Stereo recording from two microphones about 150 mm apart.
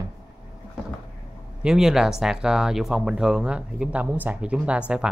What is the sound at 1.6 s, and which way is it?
Speech, 5° right (ahead or behind).